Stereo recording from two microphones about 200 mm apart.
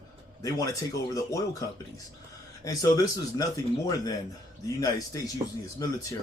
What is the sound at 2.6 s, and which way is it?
Speech, 15° left (ahead or behind).